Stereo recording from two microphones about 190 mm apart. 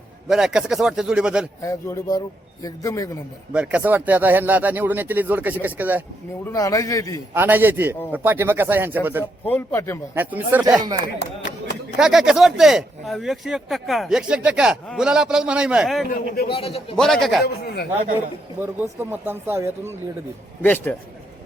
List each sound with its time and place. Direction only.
0.3 s speech: centre (ahead or behind)
1.6 s a man's voice: 15° left (ahead or behind)
3.5 s speech: 5° right (ahead or behind)
6.4 s a man's voice: 15° left (ahead or behind)
7.3 s speech: 10° right (ahead or behind)
9.5 s a man's voice: 10° left (ahead or behind)
10.2 s speech: 10° right (ahead or behind)
10.9 s chopping: 65° left (ahead or behind)
11.9 s speech: 5° right (ahead or behind)
16.5 s a man's voice: 30° left (ahead or behind)
17.0 s speech: centre (ahead or behind)
17.4 s speech: 55° left (ahead or behind)
18.6 s speech: 10° right (ahead or behind)
20.6 s a man's voice: 10° left (ahead or behind)